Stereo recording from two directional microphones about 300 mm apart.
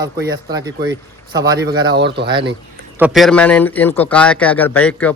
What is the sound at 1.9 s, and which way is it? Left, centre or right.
Speech, right.